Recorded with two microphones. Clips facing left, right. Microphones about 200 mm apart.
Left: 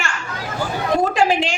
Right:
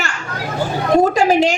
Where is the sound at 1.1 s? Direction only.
40° right (ahead or behind).